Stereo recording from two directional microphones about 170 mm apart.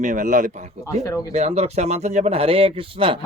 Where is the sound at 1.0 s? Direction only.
20° left (ahead or behind).